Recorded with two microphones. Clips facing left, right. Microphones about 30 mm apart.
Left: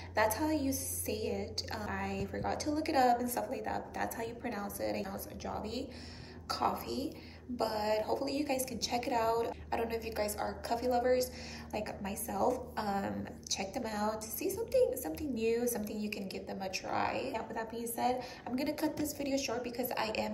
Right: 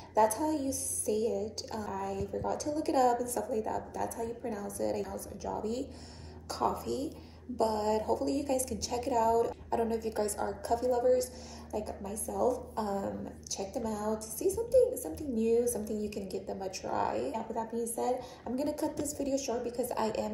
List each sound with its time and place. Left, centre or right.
0.1 s a woman's voice: left
4.4 s a woman's voice: left
12.7 s a woman's voice: left
15.8 s a woman's voice: left
17.4 s a woman's voice: left
18.4 s a woman's voice: left